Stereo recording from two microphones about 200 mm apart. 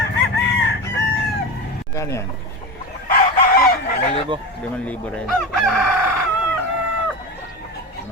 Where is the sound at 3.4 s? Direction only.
45° left (ahead or behind).